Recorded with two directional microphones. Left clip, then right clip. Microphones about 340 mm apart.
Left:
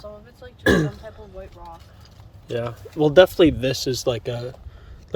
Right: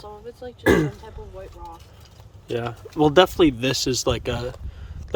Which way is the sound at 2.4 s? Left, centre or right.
Centre.